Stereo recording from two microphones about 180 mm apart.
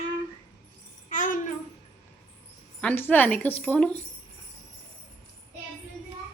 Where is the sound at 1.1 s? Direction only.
45° left (ahead or behind).